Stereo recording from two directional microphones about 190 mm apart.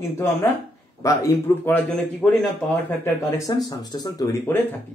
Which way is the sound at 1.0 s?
15° left (ahead or behind).